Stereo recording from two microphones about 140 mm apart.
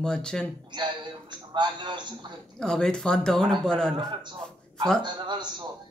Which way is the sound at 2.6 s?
5° left (ahead or behind).